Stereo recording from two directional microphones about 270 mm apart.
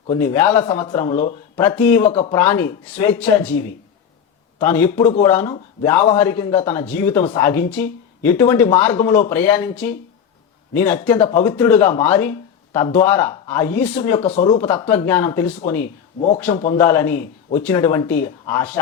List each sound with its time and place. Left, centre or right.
0.2 s speech: centre
4.6 s speech: centre
14.4 s speech: centre